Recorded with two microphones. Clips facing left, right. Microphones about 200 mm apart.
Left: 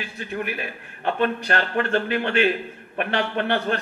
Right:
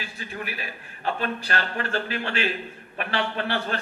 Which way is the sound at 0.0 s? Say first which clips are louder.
Left 6 dB; 55° left (ahead or behind).